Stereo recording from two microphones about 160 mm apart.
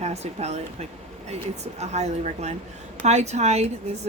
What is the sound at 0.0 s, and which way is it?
Speech, 45° right (ahead or behind).